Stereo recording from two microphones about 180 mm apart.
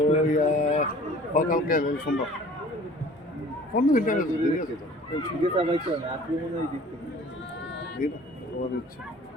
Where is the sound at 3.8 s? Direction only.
50° left (ahead or behind).